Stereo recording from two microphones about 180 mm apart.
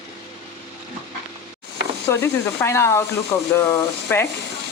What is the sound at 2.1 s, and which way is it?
Speech, 15° left (ahead or behind).